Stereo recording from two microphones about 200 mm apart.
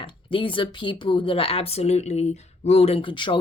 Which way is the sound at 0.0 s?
25° left (ahead or behind).